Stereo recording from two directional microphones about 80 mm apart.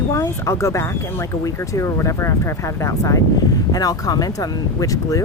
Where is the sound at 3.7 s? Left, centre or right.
Left.